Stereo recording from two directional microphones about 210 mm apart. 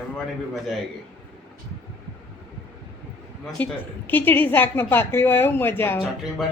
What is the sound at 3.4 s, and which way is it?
A woman's voice, 10° left (ahead or behind).